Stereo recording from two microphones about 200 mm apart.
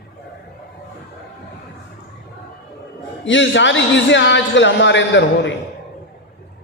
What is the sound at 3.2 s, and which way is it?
A man's voice, 65° left (ahead or behind).